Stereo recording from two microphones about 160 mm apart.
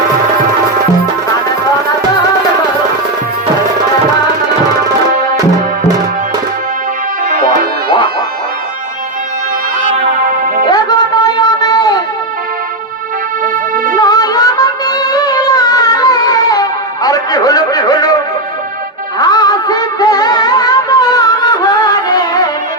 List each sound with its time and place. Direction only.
7.3 s music: 60° right (ahead or behind)
10.2 s music: 55° right (ahead or behind)
10.7 s a sound: 25° left (ahead or behind)
13.4 s music: 55° right (ahead or behind)
14.0 s music: 25° left (ahead or behind)
19.2 s music: 25° left (ahead or behind)